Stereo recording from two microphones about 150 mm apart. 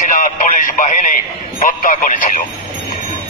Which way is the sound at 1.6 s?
60° left (ahead or behind).